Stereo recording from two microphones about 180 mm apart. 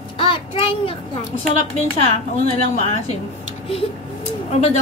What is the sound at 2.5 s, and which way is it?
Speech, 35° left (ahead or behind).